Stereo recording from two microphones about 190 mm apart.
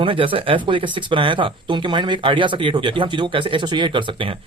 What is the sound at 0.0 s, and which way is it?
Speech, 25° right (ahead or behind).